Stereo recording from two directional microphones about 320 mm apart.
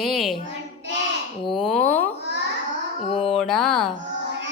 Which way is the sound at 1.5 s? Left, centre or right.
Centre.